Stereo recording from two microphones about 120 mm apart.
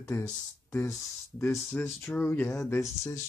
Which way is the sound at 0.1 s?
25° left (ahead or behind).